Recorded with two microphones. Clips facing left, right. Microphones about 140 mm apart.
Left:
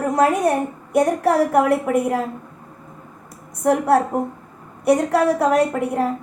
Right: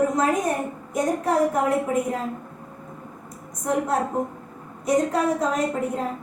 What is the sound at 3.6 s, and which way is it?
A woman's voice, 70° left (ahead or behind).